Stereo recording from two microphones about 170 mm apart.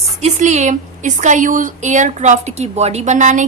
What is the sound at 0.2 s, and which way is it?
Speech, 45° right (ahead or behind).